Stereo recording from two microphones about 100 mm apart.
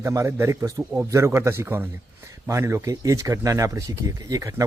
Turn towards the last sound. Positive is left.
turn(degrees=-30)  # may be behind; listen again after turning